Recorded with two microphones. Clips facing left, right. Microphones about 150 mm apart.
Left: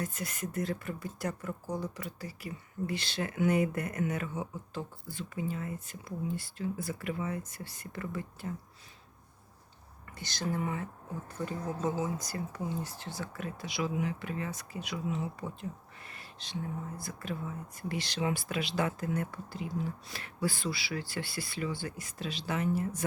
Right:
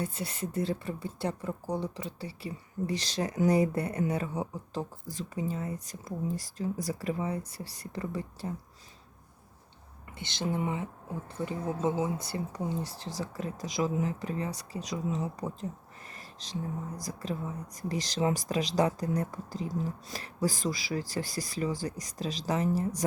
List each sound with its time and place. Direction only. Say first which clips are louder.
0.0 s speech: right 2 dB; 30° right (ahead or behind)
10.1 s speech: right 2 dB; 25° right (ahead or behind); by 15.5 s 40° right (ahead or behind)
16.0 s a sound: right 3 dB; 40° right (ahead or behind)
16.9 s speech: right 3 dB; 35° right (ahead or behind)